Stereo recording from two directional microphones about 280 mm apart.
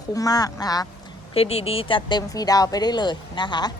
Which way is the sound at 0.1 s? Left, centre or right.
Centre.